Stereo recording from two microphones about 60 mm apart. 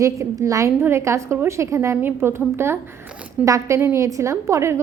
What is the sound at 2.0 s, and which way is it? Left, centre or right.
Speech, right.